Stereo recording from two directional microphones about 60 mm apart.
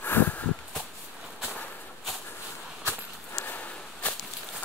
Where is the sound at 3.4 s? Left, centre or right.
Left.